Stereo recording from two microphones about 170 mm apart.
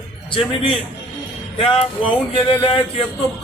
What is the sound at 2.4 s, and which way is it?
Speech, 30° left (ahead or behind).